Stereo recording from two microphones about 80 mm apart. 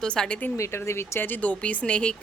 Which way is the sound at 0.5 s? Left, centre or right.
Left.